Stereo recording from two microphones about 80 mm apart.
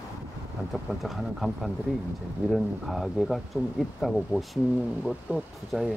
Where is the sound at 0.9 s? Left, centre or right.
Centre.